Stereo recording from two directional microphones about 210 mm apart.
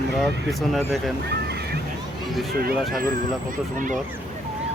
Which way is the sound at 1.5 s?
50° right (ahead or behind).